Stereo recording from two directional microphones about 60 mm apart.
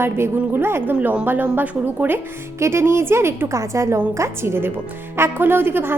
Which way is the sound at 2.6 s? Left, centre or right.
Right.